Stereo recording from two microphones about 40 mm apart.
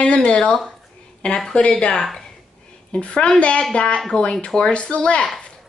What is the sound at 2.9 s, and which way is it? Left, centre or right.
A woman's voice, left.